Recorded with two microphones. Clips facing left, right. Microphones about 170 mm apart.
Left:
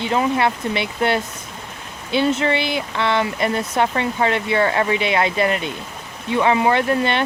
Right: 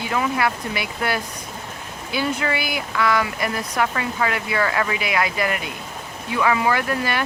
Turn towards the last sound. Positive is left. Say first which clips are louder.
# left 4 dB
turn(degrees=25)  # may be behind; listen again after turning